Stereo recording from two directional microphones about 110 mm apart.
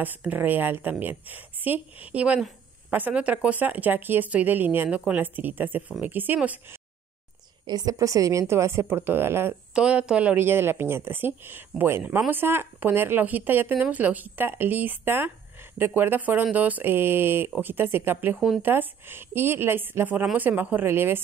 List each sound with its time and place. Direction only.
0.0 s speech: 15° right (ahead or behind)
7.6 s speech: 35° right (ahead or behind); by 9.6 s 20° right (ahead or behind)
9.8 s speech: 10° right (ahead or behind)